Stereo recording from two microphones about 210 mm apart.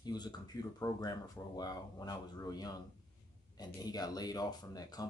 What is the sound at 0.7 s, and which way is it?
Speech, 20° left (ahead or behind).